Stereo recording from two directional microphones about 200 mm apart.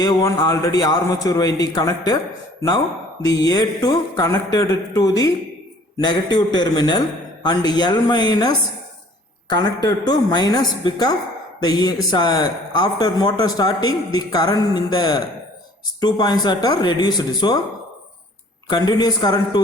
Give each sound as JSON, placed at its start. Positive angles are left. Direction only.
{"t": 0.0, "sound": "a man's voice", "side_deg": 20}
{"t": 18.7, "sound": "a man's voice", "side_deg": 20}